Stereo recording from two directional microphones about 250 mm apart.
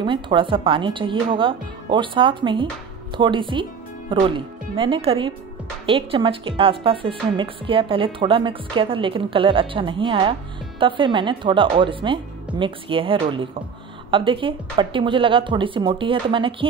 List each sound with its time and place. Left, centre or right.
0.0 s a woman's voice: centre